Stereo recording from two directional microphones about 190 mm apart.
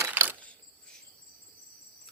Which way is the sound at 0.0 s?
10° right (ahead or behind).